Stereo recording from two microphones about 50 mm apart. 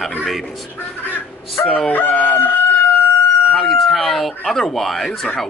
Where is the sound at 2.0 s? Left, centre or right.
Left.